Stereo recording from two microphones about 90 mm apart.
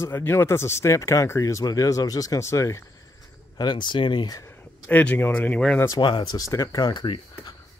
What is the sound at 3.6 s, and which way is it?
Speech, 55° left (ahead or behind).